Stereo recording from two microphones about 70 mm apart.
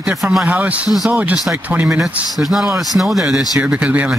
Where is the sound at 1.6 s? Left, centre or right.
Right.